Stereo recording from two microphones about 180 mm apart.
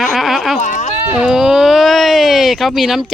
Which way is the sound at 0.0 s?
Centre (ahead or behind).